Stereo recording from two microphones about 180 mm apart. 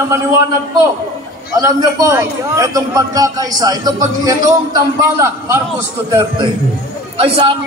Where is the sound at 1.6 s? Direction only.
20° right (ahead or behind).